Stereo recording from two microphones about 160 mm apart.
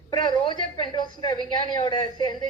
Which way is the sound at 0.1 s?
30° left (ahead or behind).